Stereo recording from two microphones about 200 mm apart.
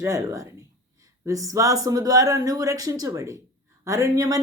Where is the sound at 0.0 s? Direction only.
15° right (ahead or behind).